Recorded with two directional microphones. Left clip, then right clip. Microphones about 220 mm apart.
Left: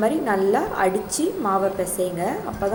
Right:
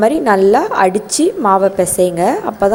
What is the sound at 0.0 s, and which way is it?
A woman's voice, 40° right (ahead or behind).